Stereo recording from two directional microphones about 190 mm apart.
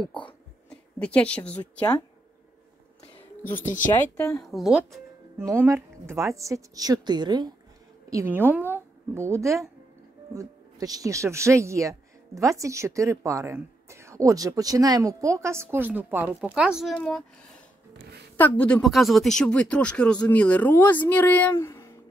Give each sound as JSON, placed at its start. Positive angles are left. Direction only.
{"t": 0.1, "sound": "a sound", "side_deg": 25}
{"t": 0.7, "sound": "a woman's voice", "side_deg": 5}
{"t": 3.5, "sound": "speech", "side_deg": 40}
{"t": 3.9, "sound": "speech", "side_deg": 5}
{"t": 5.5, "sound": "speech", "side_deg": -10}
{"t": 8.7, "sound": "a sound", "side_deg": -15}
{"t": 10.3, "sound": "speech", "side_deg": -20}